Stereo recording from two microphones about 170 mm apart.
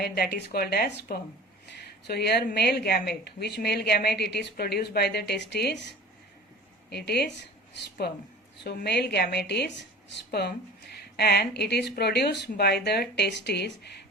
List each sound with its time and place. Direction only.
0.0 s a woman's voice: 70° left (ahead or behind)
1.7 s a woman's voice: 70° left (ahead or behind); by 6.0 s 90° left
6.9 s a woman's voice: 70° left (ahead or behind)
10.9 s a woman's voice: 70° left (ahead or behind)